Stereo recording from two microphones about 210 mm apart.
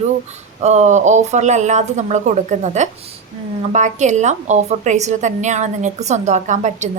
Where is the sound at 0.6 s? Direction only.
35° right (ahead or behind).